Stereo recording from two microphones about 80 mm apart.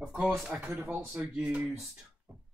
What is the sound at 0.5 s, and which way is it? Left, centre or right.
Speech, centre.